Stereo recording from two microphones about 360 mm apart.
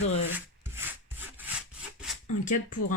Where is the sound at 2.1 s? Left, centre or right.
Centre.